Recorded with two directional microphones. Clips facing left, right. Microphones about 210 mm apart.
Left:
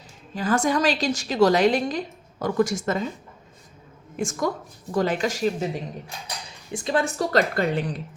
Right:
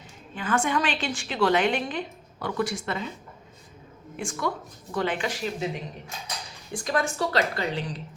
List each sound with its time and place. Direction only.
0.3 s a woman's voice: 40° left (ahead or behind)
4.2 s a woman's voice: 45° left (ahead or behind)
6.7 s speech: 25° left (ahead or behind)
7.2 s speech: 45° left (ahead or behind)